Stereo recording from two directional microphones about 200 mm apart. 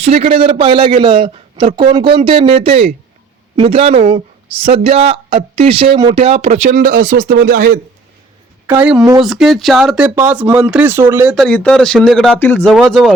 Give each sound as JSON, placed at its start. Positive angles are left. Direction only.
{"t": 0.0, "sound": "a man's voice", "side_deg": -30}
{"t": 8.6, "sound": "a woman's voice", "side_deg": -5}
{"t": 11.3, "sound": "speech", "side_deg": 5}
{"t": 12.7, "sound": "speech", "side_deg": 0}